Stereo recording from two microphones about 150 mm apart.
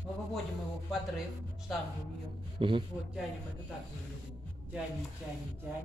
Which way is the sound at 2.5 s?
35° right (ahead or behind).